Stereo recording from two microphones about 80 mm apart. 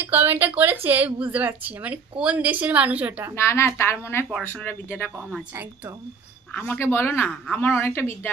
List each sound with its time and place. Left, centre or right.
0.0 s speech: right
3.3 s a woman's voice: left
6.5 s speech: left